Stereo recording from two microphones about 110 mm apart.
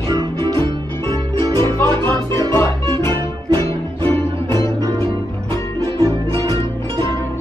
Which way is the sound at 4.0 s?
45° right (ahead or behind).